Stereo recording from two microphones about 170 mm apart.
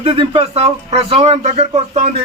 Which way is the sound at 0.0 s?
35° right (ahead or behind).